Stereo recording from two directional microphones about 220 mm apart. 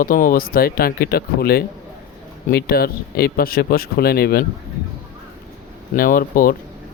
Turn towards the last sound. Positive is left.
turn(degrees=40)  # may be behind; listen again after turning